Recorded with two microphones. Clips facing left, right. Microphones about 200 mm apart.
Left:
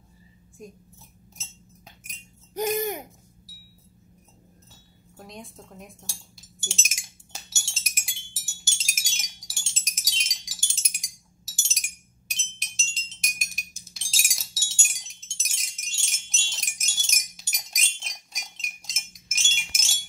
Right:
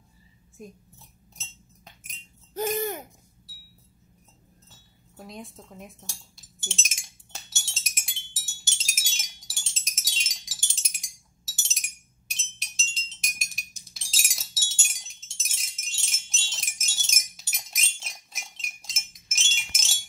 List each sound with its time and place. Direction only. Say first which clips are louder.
0.6 s speech: even; centre (ahead or behind)
2.5 s a sound: left 2 dB; 15° left (ahead or behind)
4.6 s speech: left 4 dB; centre (ahead or behind)
6.6 s chink: even; centre (ahead or behind)
12.4 s glass: right 1 dB; centre (ahead or behind)